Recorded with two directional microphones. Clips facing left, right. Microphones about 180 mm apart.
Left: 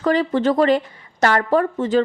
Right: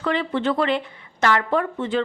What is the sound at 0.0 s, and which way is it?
A woman's voice, 40° left (ahead or behind).